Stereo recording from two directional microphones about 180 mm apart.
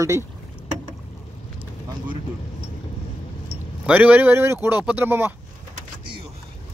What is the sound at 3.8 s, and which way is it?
Speech, 5° right (ahead or behind).